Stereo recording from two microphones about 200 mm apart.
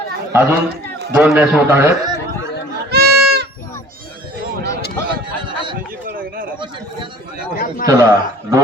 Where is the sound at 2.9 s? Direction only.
50° right (ahead or behind).